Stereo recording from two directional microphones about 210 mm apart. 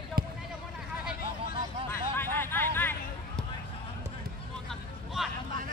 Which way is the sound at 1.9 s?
10° left (ahead or behind).